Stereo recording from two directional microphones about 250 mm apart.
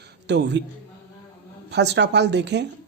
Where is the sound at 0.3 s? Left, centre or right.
Right.